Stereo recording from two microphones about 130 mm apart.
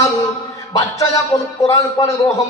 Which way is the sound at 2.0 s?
35° left (ahead or behind).